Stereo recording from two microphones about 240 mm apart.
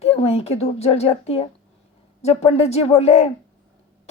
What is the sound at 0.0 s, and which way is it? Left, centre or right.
A woman's voice, left.